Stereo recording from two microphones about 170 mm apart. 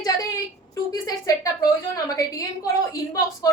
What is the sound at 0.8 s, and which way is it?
Speech, 20° left (ahead or behind).